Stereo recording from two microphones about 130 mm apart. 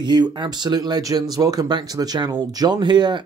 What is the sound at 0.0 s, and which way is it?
Speech, 35° right (ahead or behind).